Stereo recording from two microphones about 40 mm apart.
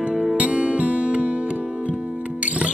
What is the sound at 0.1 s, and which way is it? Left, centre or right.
Music, centre.